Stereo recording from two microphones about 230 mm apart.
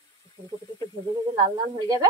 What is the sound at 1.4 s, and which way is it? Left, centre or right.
Speech, centre.